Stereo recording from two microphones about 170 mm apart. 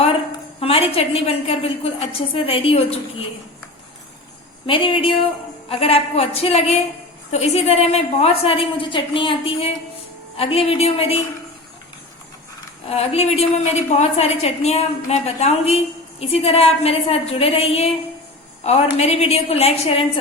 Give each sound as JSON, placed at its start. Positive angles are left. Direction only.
{"t": 0.6, "sound": "a woman's voice", "side_deg": 35}
{"t": 4.6, "sound": "a woman's voice", "side_deg": 30}
{"t": 12.9, "sound": "a woman's voice", "side_deg": 35}